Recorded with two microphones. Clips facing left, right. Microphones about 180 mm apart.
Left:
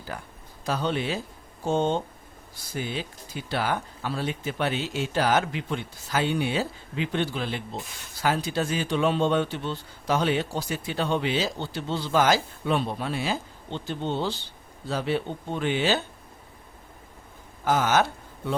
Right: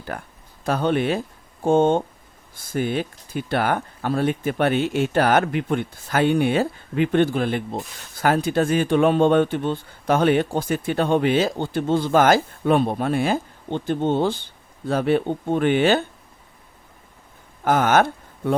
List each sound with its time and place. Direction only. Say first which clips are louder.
0.1 s speech: right 4 dB; 60° right (ahead or behind)
17.7 s speech: right 5 dB; 55° right (ahead or behind)